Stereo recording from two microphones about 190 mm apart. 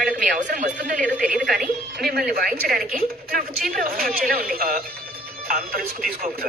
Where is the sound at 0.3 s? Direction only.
40° right (ahead or behind).